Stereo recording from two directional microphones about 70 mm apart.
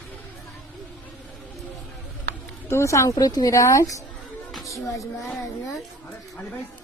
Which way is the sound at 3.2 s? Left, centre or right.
Left.